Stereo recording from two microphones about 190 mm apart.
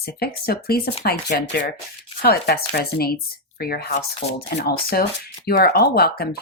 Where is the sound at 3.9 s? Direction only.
35° left (ahead or behind).